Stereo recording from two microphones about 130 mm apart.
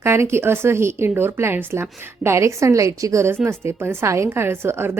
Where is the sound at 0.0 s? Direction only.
20° right (ahead or behind).